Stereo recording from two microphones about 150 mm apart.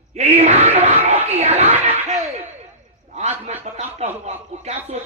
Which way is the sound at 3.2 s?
50° right (ahead or behind).